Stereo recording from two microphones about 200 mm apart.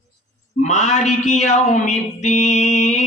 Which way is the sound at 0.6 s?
35° left (ahead or behind).